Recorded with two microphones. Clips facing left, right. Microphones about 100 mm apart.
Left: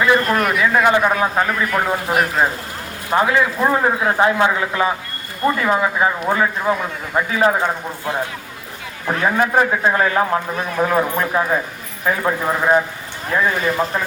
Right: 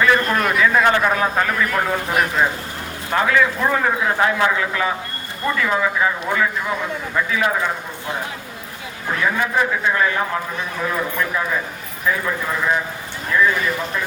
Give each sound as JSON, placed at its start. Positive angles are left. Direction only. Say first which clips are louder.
{"t": 0.3, "sound": "a man's voice", "louder": "even", "side_deg": 20}
{"t": 9.0, "sound": "a man's voice", "louder": "left 3 dB", "side_deg": 35}